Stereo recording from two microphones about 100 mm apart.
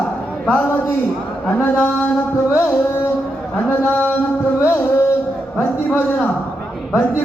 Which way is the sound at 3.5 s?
15° left (ahead or behind).